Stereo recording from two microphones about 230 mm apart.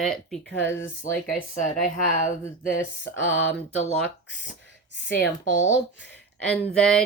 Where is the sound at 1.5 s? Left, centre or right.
Left.